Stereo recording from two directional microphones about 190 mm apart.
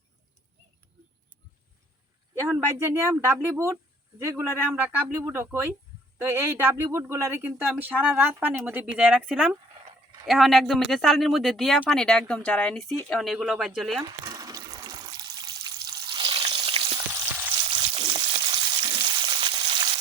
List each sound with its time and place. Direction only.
2.3 s speech: 15° right (ahead or behind)
14.3 s water: 20° right (ahead or behind)
17.6 s frying: 30° right (ahead or behind)